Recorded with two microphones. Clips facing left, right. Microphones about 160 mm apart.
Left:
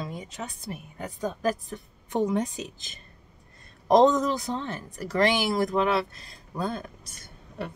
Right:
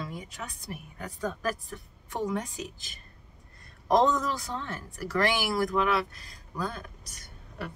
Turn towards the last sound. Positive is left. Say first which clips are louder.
# left 4 dB
turn(degrees=25)  # may be behind; listen again after turning